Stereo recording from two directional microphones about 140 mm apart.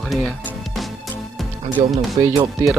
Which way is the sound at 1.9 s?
30° right (ahead or behind).